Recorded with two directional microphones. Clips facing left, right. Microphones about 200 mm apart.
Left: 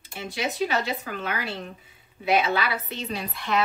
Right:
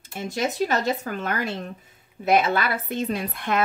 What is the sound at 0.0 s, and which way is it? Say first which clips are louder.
A woman's voice: right 4 dB; 45° right (ahead or behind).